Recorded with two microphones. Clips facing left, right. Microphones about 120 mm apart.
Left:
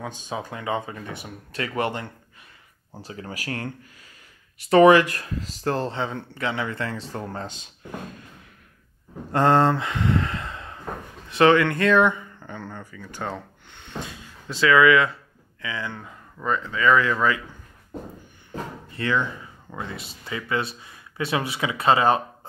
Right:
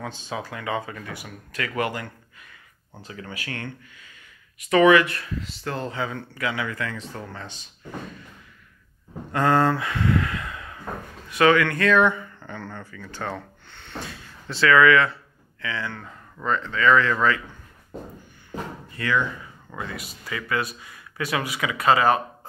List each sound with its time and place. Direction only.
0.0 s speech: 15° left (ahead or behind)
3.1 s speech: 35° left (ahead or behind)
9.3 s speech: 25° left (ahead or behind)
18.9 s speech: 25° left (ahead or behind)